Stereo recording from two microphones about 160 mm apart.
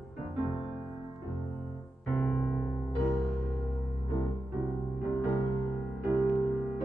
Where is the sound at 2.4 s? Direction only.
20° left (ahead or behind).